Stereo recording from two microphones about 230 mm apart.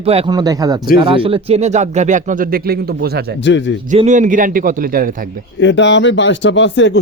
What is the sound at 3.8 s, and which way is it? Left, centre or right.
Speech, right.